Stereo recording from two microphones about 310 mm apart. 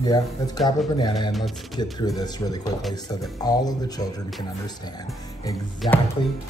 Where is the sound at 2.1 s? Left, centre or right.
Centre.